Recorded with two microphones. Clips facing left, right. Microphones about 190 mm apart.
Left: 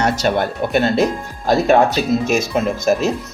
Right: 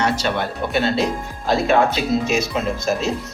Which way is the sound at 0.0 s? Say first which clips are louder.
Left 4 dB; 45° left (ahead or behind).